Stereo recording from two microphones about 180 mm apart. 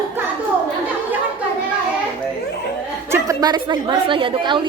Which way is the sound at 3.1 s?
20° right (ahead or behind).